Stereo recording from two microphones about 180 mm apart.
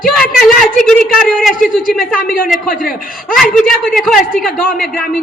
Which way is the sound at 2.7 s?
55° left (ahead or behind).